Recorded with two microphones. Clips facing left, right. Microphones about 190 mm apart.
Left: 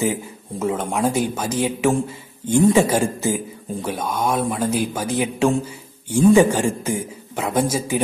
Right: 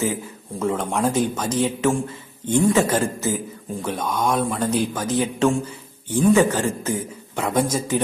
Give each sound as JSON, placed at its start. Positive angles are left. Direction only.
{"t": 0.0, "sound": "a man's voice", "side_deg": 10}